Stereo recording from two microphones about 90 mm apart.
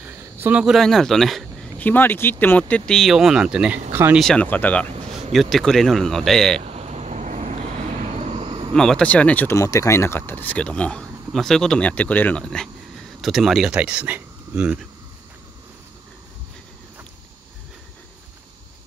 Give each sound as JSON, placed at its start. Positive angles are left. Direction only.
{"t": 0.0, "sound": "a sound", "side_deg": -20}
{"t": 0.7, "sound": "speech", "side_deg": 0}
{"t": 1.8, "sound": "speech", "side_deg": 20}
{"t": 2.7, "sound": "speech", "side_deg": 5}
{"t": 4.2, "sound": "speech", "side_deg": 5}
{"t": 5.1, "sound": "speech", "side_deg": 0}
{"t": 8.4, "sound": "a sound", "side_deg": -90}
{"t": 8.7, "sound": "speech", "side_deg": 5}
{"t": 9.0, "sound": "speech", "side_deg": 15}
{"t": 9.5, "sound": "speech", "side_deg": 35}
{"t": 13.2, "sound": "speech", "side_deg": 0}
{"t": 13.7, "sound": "speech", "side_deg": -15}